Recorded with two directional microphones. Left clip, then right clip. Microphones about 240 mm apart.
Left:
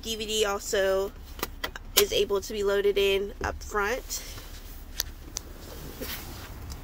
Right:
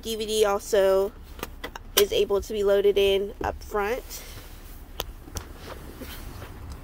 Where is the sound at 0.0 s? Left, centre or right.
Centre.